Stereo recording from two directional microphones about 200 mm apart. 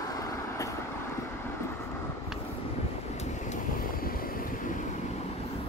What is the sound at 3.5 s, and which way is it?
Vehicle, 45° left (ahead or behind).